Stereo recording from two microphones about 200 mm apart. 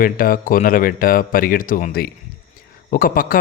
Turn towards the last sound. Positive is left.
turn(degrees=45)  # may be behind; listen again after turning